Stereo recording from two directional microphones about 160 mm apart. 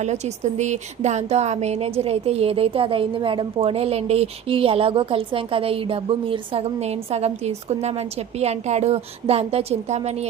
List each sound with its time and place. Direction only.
0.0 s a woman's voice: 45° right (ahead or behind)